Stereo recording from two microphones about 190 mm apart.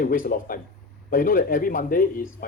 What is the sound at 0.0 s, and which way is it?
Speech, 45° left (ahead or behind).